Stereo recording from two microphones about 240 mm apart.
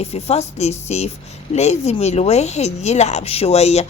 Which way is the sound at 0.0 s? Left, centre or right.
Left.